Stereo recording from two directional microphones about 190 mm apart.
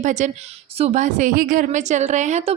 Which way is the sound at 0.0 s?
40° right (ahead or behind).